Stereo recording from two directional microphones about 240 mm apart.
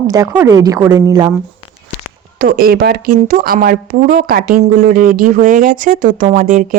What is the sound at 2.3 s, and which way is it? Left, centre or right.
A woman's voice, right.